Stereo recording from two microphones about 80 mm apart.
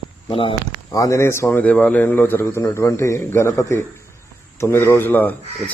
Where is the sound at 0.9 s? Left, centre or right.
Left.